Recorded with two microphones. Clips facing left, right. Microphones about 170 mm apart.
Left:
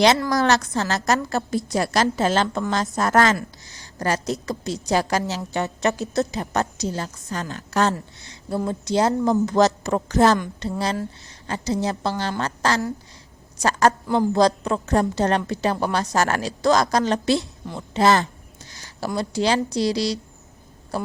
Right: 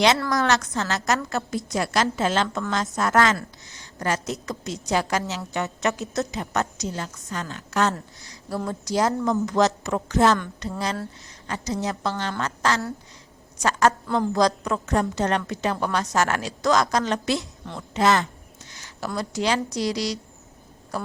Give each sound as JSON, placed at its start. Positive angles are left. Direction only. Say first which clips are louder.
{"t": 0.3, "sound": "a woman's voice", "louder": "left 3 dB", "side_deg": 35}